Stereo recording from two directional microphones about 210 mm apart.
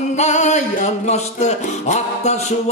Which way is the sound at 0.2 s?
35° left (ahead or behind).